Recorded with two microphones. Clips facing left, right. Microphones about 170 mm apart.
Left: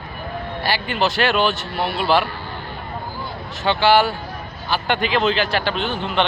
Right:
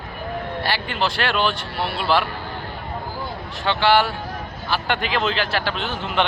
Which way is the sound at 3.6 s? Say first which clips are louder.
Left 2 dB; centre (ahead or behind).